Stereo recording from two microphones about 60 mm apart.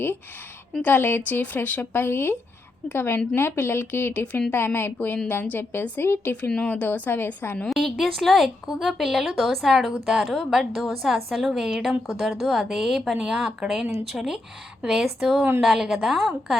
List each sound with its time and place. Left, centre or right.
0.8 s speech: left
4.5 s speech: left
7.7 s a woman's voice: centre